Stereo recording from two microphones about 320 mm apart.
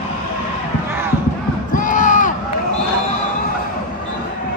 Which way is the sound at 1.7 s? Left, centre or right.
Left.